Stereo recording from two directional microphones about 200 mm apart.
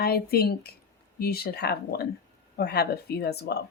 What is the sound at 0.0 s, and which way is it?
Speech, 50° left (ahead or behind).